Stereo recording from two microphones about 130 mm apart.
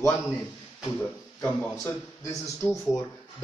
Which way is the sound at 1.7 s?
25° left (ahead or behind).